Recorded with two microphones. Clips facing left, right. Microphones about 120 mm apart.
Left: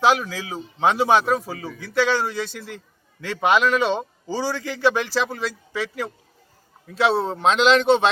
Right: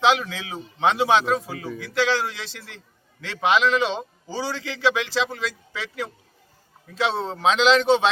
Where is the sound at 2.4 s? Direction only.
50° left (ahead or behind).